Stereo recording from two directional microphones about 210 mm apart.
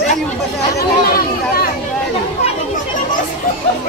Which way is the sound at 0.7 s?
45° left (ahead or behind).